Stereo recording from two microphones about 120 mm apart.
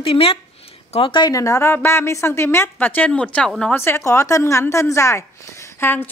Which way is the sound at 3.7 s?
20° left (ahead or behind).